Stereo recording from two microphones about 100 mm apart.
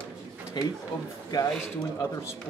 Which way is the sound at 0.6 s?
45° left (ahead or behind).